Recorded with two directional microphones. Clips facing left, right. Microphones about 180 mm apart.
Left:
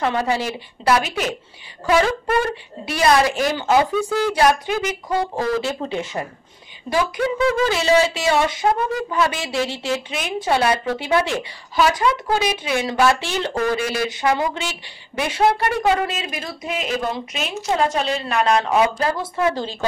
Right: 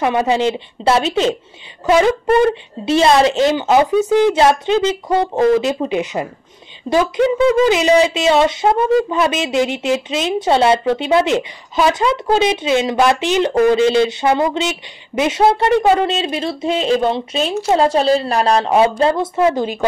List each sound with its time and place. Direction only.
0.0 s a woman's voice: 20° right (ahead or behind)